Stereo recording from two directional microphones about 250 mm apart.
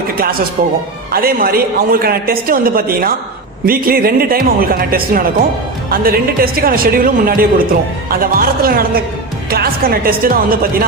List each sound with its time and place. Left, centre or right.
1.1 s a man's voice: right